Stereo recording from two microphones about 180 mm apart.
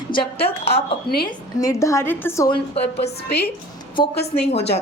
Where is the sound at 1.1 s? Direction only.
60° left (ahead or behind).